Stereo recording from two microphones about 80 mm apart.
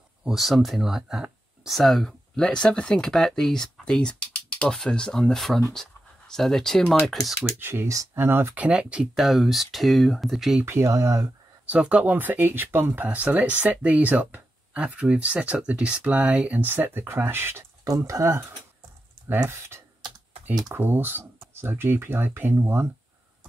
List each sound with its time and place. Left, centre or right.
0.2 s speech: centre
7.5 s speech: right
7.9 s speech: right
8.2 s speech: right; by 9.1 s centre
9.1 s speech: centre
10.6 s speech: right
11.6 s speech: centre
17.8 s speech: right
19.5 s speech: right